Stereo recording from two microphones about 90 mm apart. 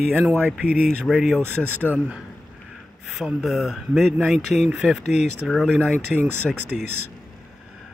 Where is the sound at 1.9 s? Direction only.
20° right (ahead or behind).